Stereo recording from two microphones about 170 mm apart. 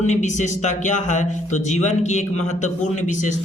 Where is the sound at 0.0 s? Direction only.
45° left (ahead or behind).